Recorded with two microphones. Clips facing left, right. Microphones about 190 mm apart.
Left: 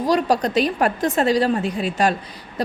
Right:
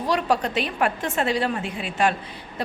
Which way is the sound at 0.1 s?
40° left (ahead or behind).